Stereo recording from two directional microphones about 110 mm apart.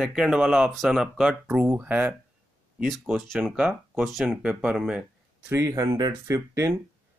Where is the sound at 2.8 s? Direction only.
Centre (ahead or behind).